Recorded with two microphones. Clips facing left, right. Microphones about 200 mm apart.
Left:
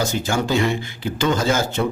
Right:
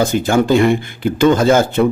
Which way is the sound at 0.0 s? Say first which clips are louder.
Right 8 dB; 55° right (ahead or behind).